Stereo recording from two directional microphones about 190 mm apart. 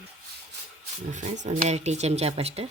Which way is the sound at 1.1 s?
35° right (ahead or behind).